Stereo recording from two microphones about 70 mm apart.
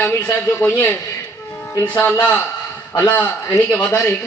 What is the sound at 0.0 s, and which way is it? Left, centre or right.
A man's voice, left.